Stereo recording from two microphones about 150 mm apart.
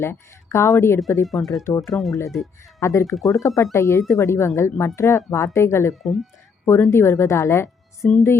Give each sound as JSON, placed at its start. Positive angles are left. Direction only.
{"t": 0.0, "sound": "speech", "side_deg": 15}
{"t": 1.3, "sound": "speech", "side_deg": 0}
{"t": 2.8, "sound": "speech", "side_deg": 20}
{"t": 5.9, "sound": "speech", "side_deg": 0}
{"t": 6.7, "sound": "speech", "side_deg": 15}